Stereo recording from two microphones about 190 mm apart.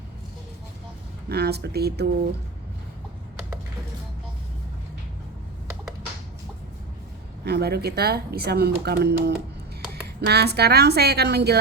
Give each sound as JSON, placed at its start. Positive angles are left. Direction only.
{"t": 1.3, "sound": "speech", "side_deg": -55}
{"t": 7.4, "sound": "speech", "side_deg": -55}